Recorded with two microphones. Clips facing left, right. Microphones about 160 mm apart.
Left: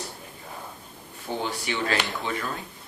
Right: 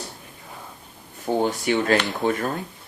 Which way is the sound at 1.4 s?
45° right (ahead or behind).